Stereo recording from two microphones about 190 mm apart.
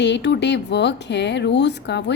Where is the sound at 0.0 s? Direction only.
65° left (ahead or behind).